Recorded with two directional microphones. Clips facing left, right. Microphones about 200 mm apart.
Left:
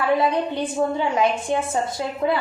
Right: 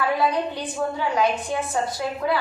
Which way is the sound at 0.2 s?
25° left (ahead or behind).